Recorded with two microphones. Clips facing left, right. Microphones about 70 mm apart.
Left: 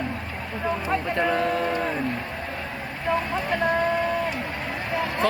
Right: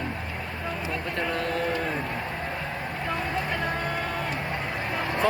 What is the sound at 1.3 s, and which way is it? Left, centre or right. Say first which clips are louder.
Speech: left 4 dB; centre.